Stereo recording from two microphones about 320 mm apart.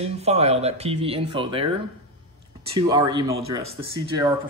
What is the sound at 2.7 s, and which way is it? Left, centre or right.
Speech, centre.